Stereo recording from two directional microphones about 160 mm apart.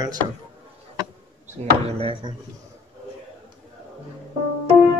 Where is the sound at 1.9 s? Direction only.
35° right (ahead or behind).